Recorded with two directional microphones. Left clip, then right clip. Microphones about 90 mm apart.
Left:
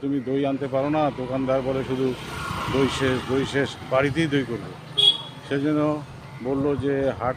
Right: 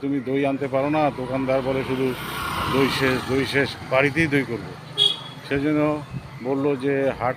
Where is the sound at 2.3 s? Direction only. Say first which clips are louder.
Right 4 dB; 90° right.